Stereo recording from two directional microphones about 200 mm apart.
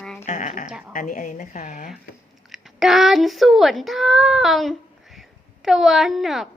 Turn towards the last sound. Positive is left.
turn(degrees=0)  # may be behind; listen again after turning